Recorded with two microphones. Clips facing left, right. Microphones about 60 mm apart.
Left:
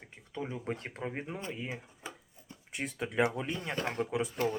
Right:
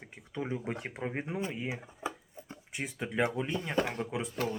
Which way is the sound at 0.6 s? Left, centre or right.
Centre.